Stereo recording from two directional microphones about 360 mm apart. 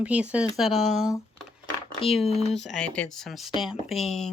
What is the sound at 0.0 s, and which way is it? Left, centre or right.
Speech, centre.